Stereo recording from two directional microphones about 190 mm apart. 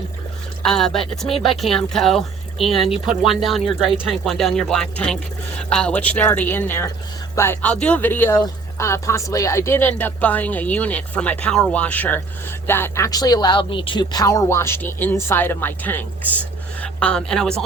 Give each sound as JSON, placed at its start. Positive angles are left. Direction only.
{"t": 0.6, "sound": "speech", "side_deg": 0}